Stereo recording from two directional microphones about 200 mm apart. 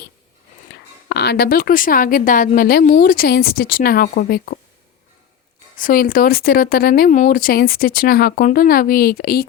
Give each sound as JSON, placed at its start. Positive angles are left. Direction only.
{"t": 1.0, "sound": "speech", "side_deg": 55}
{"t": 5.7, "sound": "speech", "side_deg": 45}